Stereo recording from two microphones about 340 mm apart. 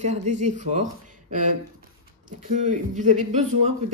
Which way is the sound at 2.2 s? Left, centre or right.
Right.